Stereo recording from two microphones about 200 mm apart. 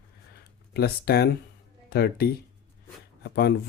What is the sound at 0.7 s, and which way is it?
Speech, 55° left (ahead or behind).